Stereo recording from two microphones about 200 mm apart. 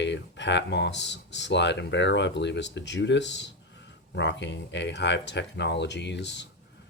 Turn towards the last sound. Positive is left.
turn(degrees=60)  # may be behind; listen again after turning